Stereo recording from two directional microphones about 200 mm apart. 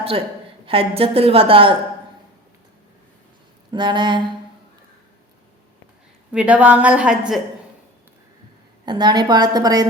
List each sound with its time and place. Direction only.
0.6 s a woman's voice: 30° right (ahead or behind)
3.7 s a woman's voice: 20° right (ahead or behind)
6.3 s a woman's voice: 5° right (ahead or behind)
8.9 s a woman's voice: 20° right (ahead or behind)